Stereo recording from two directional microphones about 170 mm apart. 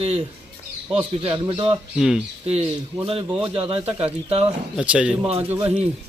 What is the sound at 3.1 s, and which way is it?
A man's voice, 30° right (ahead or behind).